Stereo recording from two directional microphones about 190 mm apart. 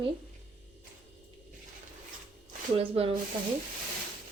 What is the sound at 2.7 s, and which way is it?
Speech, 30° right (ahead or behind).